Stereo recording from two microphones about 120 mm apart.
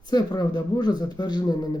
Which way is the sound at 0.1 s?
35° left (ahead or behind).